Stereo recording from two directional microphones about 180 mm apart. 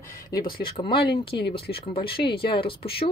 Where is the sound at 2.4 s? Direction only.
30° left (ahead or behind).